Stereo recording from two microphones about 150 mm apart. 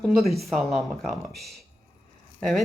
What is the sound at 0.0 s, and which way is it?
A woman's voice, centre (ahead or behind).